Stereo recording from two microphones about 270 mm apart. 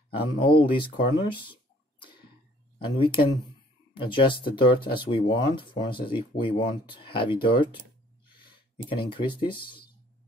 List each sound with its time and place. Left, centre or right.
0.1 s speech: centre